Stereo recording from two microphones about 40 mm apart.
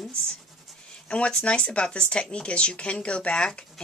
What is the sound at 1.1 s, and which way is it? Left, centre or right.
Speech, left.